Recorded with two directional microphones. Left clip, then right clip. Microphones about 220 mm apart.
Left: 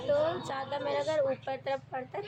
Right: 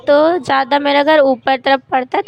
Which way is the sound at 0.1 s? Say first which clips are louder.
Right 19 dB; 45° right (ahead or behind).